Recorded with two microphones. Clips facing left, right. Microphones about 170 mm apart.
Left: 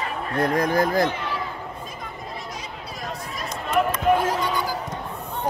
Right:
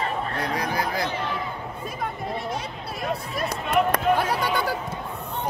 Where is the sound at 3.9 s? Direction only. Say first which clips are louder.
Left 1 dB; 65° right (ahead or behind).